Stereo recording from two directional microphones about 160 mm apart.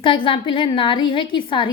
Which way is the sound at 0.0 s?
30° left (ahead or behind).